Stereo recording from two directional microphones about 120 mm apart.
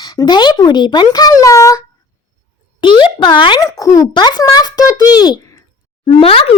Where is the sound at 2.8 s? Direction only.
40° left (ahead or behind).